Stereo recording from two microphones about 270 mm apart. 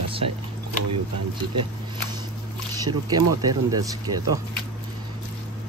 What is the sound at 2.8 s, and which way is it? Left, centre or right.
Speech, centre.